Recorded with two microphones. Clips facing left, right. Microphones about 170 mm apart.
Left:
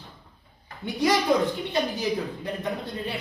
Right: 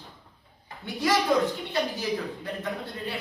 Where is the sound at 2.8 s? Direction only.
20° left (ahead or behind).